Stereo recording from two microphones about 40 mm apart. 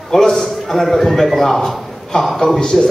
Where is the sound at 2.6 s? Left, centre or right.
Centre.